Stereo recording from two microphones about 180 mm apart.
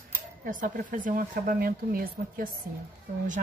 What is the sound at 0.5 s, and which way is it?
Speech, 45° right (ahead or behind).